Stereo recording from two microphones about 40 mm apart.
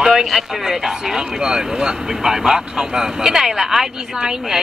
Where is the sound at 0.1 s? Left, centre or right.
Centre.